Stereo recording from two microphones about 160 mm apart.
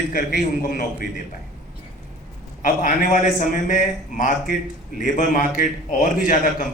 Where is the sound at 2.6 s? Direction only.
55° left (ahead or behind).